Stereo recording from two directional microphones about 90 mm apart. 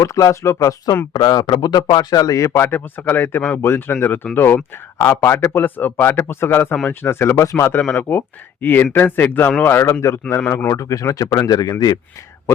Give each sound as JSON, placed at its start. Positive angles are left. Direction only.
{"t": 0.0, "sound": "speech", "side_deg": 35}
{"t": 1.1, "sound": "speech", "side_deg": 50}
{"t": 2.5, "sound": "speech", "side_deg": 25}